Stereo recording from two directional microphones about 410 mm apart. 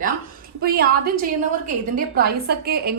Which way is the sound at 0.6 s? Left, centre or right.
Right.